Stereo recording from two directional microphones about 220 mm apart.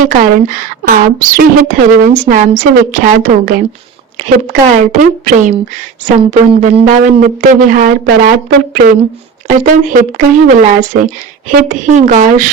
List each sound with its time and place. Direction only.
0.0 s speech: 40° right (ahead or behind)